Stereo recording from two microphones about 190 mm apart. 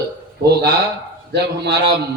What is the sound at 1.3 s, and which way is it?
Speech, 60° right (ahead or behind).